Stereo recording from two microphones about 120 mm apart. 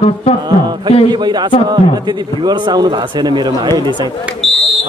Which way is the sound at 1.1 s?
40° right (ahead or behind).